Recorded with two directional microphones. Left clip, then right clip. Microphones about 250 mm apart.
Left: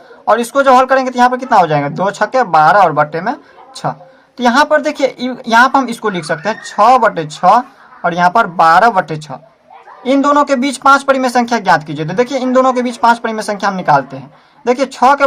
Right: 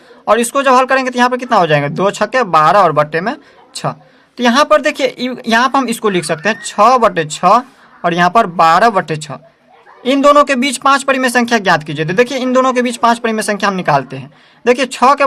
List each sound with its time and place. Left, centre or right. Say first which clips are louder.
0.3 s speech: left 1 dB; right
4.4 s speech: even; right